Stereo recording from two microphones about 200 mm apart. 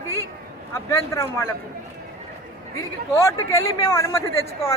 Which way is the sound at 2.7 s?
15° left (ahead or behind).